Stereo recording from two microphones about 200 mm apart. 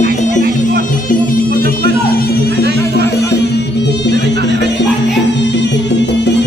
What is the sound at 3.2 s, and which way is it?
Music, 55° left (ahead or behind).